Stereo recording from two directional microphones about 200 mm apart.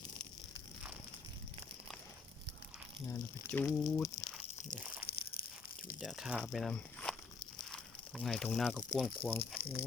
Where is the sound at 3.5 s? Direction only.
10° left (ahead or behind).